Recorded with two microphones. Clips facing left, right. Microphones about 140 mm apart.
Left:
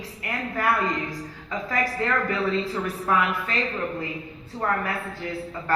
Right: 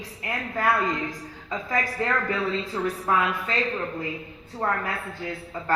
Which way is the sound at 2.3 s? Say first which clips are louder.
Left 2 dB; 25° right (ahead or behind).